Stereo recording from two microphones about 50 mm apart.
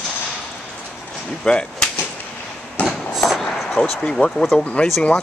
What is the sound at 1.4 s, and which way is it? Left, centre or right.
Speech, centre.